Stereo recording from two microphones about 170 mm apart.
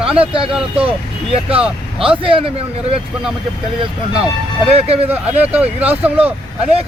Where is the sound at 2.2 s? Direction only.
30° right (ahead or behind).